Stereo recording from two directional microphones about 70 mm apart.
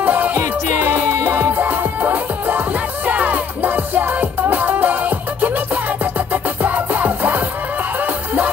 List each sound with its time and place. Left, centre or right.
0.0 s music: right